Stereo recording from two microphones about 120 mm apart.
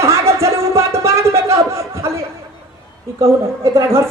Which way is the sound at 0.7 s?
25° right (ahead or behind).